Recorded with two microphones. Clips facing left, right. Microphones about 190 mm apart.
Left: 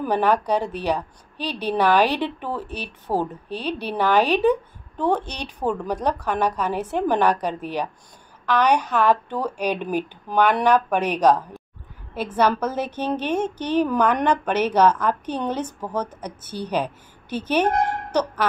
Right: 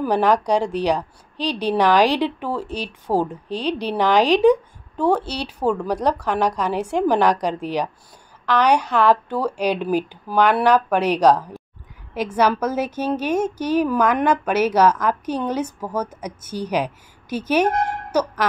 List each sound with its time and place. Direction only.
0.0 s a woman's voice: 10° right (ahead or behind)
9.0 s a woman's voice: 10° right (ahead or behind)